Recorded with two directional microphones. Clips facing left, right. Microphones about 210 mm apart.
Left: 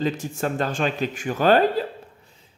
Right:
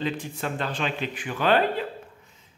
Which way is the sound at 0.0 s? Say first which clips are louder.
Left 4 dB; 45° left (ahead or behind).